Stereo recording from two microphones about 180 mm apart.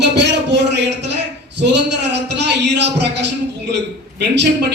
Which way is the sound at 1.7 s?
75° right (ahead or behind).